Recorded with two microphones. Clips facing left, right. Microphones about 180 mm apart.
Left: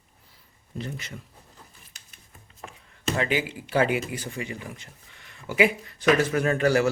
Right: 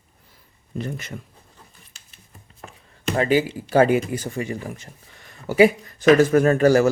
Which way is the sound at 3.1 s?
40° right (ahead or behind).